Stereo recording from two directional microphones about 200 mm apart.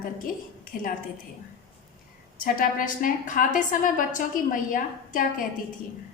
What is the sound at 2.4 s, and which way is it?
A woman's voice, 45° left (ahead or behind).